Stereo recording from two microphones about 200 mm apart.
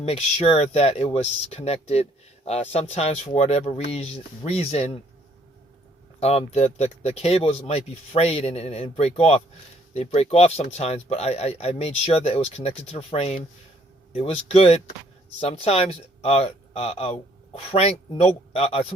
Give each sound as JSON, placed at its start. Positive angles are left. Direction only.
{"t": 0.0, "sound": "speech", "side_deg": 30}
{"t": 6.1, "sound": "speech", "side_deg": 30}